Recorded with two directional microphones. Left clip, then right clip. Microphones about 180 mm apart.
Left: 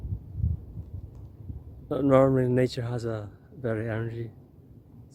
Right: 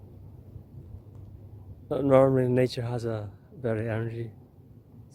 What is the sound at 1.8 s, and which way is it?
A man's voice, 10° right (ahead or behind).